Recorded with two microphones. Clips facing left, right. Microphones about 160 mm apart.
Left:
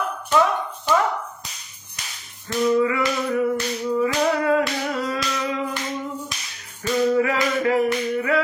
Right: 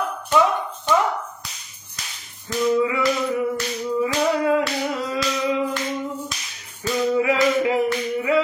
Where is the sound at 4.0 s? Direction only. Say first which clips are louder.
Right 1 dB; 15° right (ahead or behind).